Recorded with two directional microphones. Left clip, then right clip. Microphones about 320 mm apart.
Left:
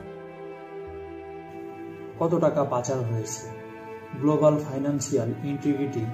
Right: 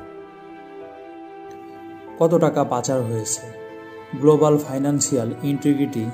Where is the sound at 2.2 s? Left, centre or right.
Right.